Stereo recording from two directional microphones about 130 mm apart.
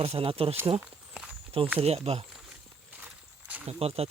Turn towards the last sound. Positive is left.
turn(degrees=-50)  # may be behind; listen again after turning